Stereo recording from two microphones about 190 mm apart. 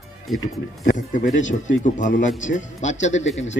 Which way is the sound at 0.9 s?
40° left (ahead or behind).